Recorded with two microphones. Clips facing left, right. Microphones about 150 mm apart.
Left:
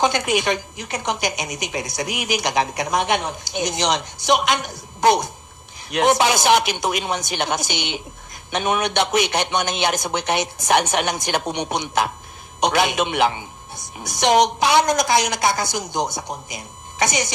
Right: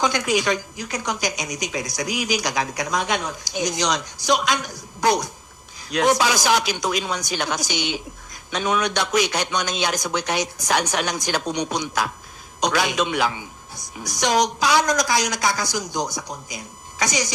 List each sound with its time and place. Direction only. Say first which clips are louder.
0.0 s a woman's voice: left 2 dB; 25° left (ahead or behind)
2.0 s a man's voice: right 3 dB; 55° left (ahead or behind)
2.4 s a woman's voice: left 3 dB; 25° left (ahead or behind)